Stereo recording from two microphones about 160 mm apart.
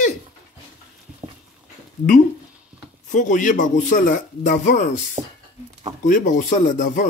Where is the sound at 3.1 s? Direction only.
50° left (ahead or behind).